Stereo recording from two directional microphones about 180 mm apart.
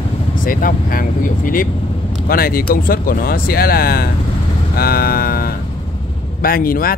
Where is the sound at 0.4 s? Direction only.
50° left (ahead or behind).